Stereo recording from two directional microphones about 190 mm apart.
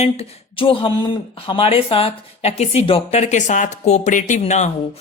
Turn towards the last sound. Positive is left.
turn(degrees=35)  # may be behind; listen again after turning